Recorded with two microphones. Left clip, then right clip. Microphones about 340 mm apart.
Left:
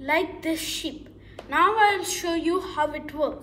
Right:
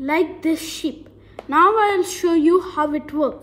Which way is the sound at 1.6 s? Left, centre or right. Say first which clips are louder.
Right 4 dB; right.